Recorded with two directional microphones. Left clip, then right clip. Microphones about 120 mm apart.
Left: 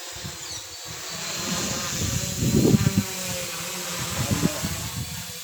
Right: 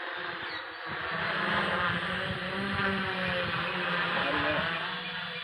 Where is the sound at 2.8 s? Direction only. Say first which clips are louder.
Even; 45° left (ahead or behind).